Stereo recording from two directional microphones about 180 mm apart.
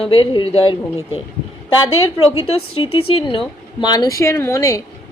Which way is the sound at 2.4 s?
30° left (ahead or behind).